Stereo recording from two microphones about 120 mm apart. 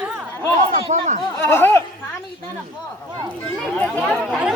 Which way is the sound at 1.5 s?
20° left (ahead or behind).